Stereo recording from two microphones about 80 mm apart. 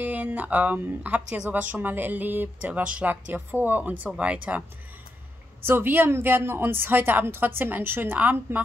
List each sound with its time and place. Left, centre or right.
0.0 s speech: centre
5.7 s speech: right